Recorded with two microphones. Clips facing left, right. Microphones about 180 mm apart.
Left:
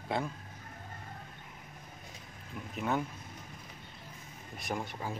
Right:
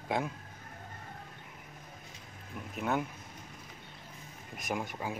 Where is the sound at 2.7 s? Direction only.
5° right (ahead or behind).